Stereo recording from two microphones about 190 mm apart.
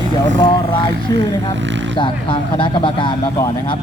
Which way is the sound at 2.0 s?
25° left (ahead or behind).